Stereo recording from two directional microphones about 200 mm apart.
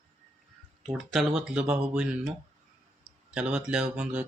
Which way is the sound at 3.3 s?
5° right (ahead or behind).